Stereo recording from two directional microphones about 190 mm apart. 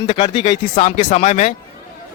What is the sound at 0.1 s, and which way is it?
A man's voice, 30° left (ahead or behind).